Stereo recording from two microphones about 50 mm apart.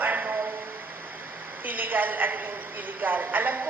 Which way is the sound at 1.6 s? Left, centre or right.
Right.